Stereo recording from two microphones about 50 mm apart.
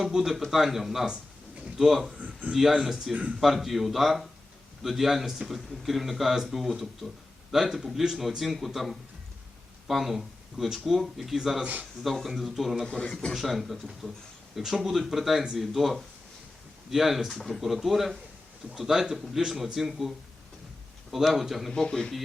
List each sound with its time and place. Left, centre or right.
0.0 s speech: centre
2.1 s a sound: right
2.5 s a man's voice: centre
11.6 s speech: right
12.0 s speech: centre
13.0 s a man's voice: centre
13.3 s a man's voice: centre
21.3 s speech: centre
21.7 s speech: centre